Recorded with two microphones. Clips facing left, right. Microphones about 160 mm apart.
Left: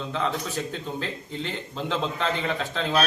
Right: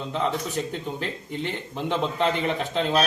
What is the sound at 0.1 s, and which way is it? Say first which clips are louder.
A man's voice: right 2 dB; 20° right (ahead or behind).